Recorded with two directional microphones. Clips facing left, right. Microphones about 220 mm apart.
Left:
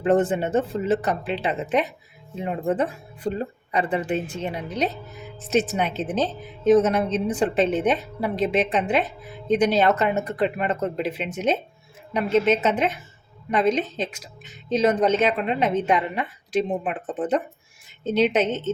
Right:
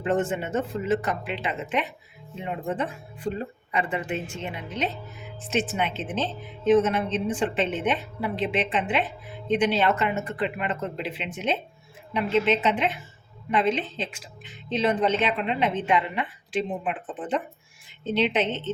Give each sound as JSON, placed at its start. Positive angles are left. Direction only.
{"t": 0.0, "sound": "a woman's voice", "side_deg": 35}